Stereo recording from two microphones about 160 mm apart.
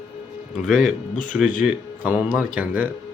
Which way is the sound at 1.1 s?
55° left (ahead or behind).